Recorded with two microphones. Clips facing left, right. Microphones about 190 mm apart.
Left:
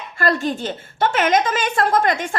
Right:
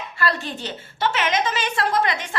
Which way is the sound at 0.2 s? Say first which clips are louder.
Left 6 dB; 50° left (ahead or behind).